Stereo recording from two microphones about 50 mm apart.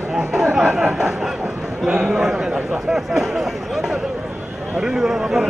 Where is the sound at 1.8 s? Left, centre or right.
Centre.